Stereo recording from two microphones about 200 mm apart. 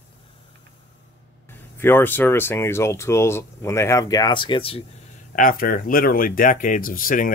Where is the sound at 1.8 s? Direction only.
10° left (ahead or behind); by 4.8 s 25° left (ahead or behind).